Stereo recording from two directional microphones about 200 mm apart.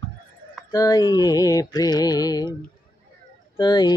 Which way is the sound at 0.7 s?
15° left (ahead or behind).